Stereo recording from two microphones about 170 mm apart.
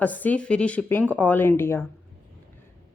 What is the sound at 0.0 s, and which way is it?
Speech, 10° left (ahead or behind).